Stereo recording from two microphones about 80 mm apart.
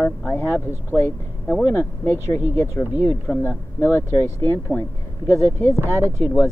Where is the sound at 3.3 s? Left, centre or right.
Left.